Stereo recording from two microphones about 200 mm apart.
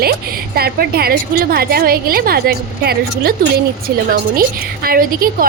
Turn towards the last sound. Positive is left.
turn(degrees=-45)  # may be behind; listen again after turning